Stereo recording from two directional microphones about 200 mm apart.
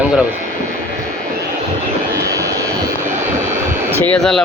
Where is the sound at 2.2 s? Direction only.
15° right (ahead or behind).